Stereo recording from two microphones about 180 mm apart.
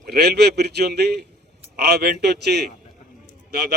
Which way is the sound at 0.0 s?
65° right (ahead or behind).